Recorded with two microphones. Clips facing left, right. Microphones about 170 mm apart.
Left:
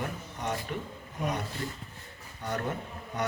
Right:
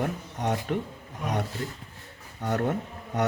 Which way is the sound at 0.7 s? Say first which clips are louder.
Right 7 dB; 60° right (ahead or behind).